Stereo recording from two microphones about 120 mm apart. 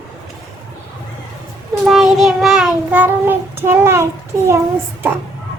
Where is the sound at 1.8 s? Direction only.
Centre (ahead or behind); by 4.1 s 20° right (ahead or behind).